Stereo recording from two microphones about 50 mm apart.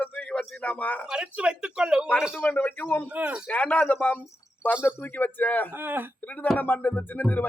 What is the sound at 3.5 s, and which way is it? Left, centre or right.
Speech, left.